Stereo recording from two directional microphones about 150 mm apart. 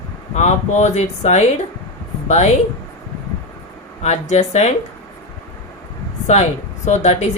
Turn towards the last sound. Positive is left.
turn(degrees=50)  # may be behind; listen again after turning